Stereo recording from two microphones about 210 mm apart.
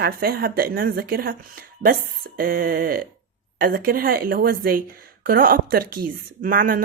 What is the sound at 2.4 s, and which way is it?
A woman's voice, 45° right (ahead or behind).